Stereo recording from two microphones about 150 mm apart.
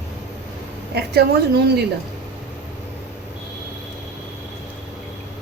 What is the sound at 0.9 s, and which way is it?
Speech, 90° right.